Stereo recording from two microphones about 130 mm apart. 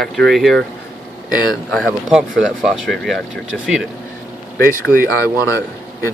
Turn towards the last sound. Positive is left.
turn(degrees=20)  # may be behind; listen again after turning